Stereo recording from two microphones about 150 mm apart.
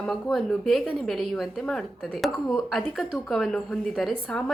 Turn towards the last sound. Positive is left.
turn(degrees=5)  # may be behind; listen again after turning